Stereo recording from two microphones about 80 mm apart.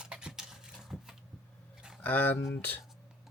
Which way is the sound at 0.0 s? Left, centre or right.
Centre.